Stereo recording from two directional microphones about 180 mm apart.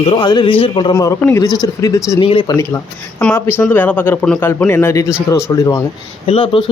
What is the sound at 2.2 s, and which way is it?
Speech, 30° left (ahead or behind).